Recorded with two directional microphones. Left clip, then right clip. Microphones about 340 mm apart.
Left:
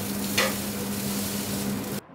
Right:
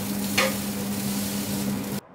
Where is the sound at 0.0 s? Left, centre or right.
Centre.